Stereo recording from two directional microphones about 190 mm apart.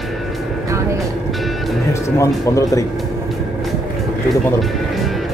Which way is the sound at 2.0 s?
15° left (ahead or behind).